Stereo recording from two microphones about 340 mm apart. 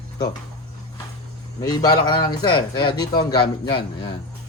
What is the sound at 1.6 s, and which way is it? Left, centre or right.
A man's voice, centre.